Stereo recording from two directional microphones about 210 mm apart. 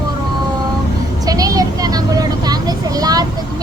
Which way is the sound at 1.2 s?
15° right (ahead or behind).